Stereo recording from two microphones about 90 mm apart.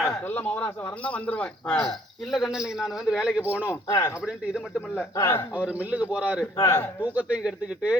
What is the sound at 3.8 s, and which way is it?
Speech, 40° left (ahead or behind).